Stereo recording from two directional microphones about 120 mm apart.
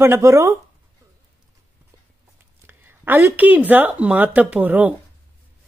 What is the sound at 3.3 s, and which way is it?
Speech, 15° right (ahead or behind).